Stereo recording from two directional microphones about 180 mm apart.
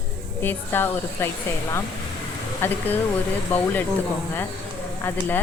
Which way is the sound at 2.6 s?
15° left (ahead or behind).